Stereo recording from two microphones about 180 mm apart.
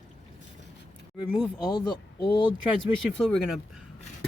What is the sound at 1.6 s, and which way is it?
Speech, 25° left (ahead or behind).